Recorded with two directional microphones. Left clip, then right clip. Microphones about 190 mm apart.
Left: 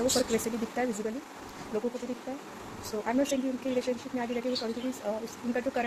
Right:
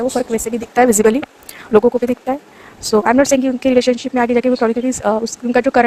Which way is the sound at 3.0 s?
60° right (ahead or behind).